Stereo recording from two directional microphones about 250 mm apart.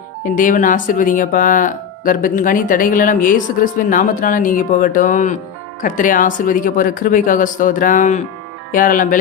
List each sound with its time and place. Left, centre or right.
0.3 s speech: left